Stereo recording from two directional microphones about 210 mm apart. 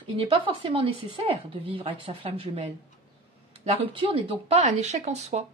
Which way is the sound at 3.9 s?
25° right (ahead or behind).